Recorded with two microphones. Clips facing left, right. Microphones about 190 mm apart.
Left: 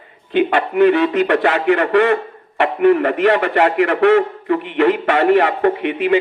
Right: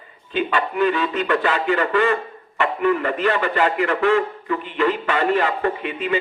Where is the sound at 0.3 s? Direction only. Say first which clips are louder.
Left 7 dB; 70° left (ahead or behind).